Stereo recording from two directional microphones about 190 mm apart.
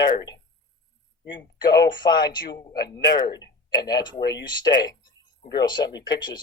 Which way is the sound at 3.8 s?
20° left (ahead or behind).